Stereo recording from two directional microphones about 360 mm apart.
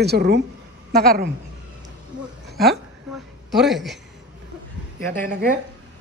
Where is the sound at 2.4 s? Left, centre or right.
Right.